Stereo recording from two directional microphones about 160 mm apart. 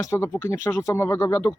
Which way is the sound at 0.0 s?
20° left (ahead or behind).